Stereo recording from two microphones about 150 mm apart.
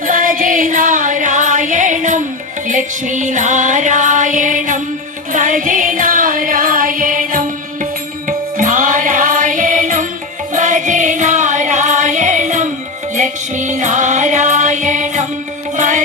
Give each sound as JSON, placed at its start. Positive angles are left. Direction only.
{"t": 0.0, "sound": "music", "side_deg": -65}